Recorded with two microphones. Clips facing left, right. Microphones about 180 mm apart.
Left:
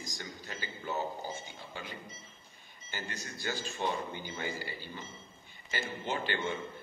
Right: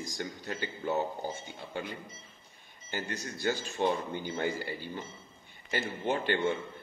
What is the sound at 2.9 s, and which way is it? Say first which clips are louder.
A man's voice: right 5 dB; 55° right (ahead or behind).